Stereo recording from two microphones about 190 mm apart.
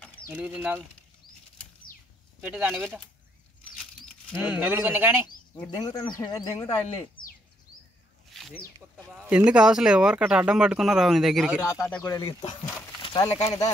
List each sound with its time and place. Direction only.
0.3 s speech: 10° right (ahead or behind)
2.4 s speech: 5° right (ahead or behind)
3.7 s patter: 5° left (ahead or behind)
4.4 s speech: 10° right (ahead or behind)
5.7 s speech: 20° left (ahead or behind)
7.2 s a sound: 25° left (ahead or behind)
8.3 s a sound: centre (ahead or behind)
8.9 s speech: 5° right (ahead or behind)
12.0 s speech: 15° left (ahead or behind)